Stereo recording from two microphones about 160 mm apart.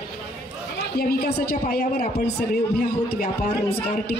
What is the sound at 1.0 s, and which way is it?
Speech, 75° left (ahead or behind).